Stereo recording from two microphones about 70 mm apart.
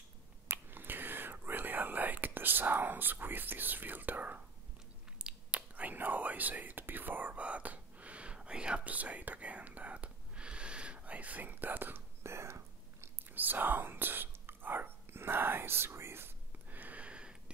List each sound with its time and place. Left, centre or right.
0.5 s whispering: right
12.2 s whispering: right
13.3 s whispering: right